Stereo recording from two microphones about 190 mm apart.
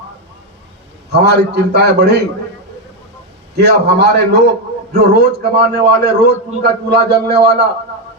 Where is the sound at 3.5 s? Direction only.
60° right (ahead or behind).